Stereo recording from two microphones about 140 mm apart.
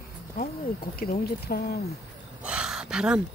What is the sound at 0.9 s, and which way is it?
Speech, 90° left.